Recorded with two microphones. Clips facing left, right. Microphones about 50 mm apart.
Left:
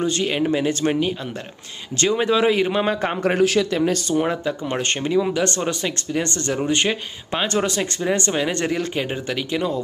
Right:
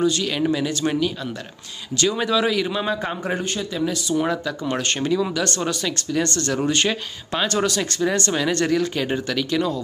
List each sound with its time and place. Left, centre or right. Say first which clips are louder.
0.0 s speech: even; left
3.3 s speech: left 9 dB; left
3.7 s speech: left 4 dB; left
4.3 s speech: even; left